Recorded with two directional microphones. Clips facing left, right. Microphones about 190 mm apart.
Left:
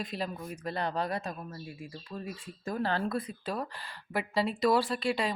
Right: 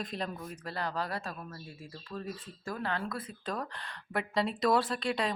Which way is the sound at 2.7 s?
30° left (ahead or behind).